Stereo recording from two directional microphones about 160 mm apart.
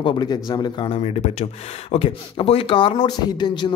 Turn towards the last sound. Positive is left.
turn(degrees=30)  # may be behind; listen again after turning